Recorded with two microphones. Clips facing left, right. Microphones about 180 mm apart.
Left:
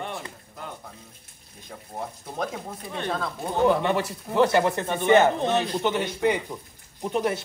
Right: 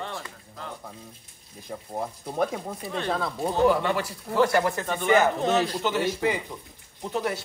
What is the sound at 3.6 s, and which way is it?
Speech, 20° left (ahead or behind).